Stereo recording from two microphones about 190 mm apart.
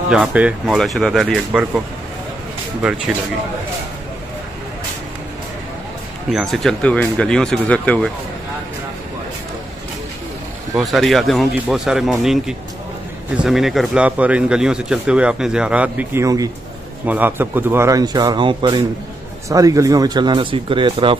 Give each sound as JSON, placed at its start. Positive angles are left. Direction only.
{"t": 0.1, "sound": "speech", "side_deg": -5}
{"t": 6.3, "sound": "speech", "side_deg": 0}
{"t": 10.7, "sound": "speech", "side_deg": 0}